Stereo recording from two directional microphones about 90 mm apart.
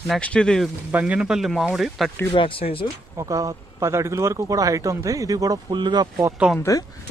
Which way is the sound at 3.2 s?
40° right (ahead or behind).